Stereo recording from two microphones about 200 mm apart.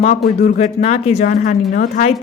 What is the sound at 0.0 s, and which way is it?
A woman's voice, 35° left (ahead or behind).